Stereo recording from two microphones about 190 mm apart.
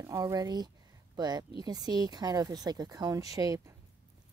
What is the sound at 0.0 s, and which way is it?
Speech, 15° right (ahead or behind).